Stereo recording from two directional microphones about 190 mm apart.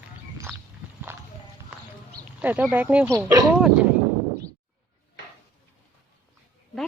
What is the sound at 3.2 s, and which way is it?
Speech, 20° right (ahead or behind).